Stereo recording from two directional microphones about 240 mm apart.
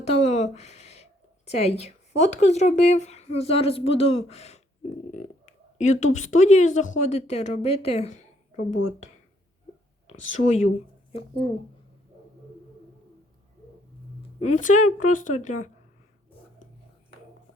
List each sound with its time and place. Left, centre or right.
0.0 s a sound: left
1.5 s speech: left
5.1 s a sound: left
6.1 s speech: left
10.1 s speech: left
14.2 s speech: left